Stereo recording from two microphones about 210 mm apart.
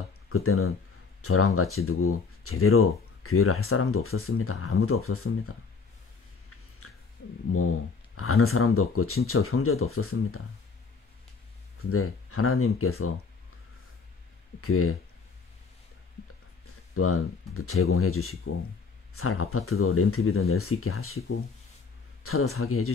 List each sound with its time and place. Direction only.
0.3 s speech: 90° left
6.8 s a sound: 90° left
8.2 s speech: 90° left
11.9 s speech: 90° left
14.6 s speech: 90° left
16.6 s speech: 90° left
22.2 s speech: 90° left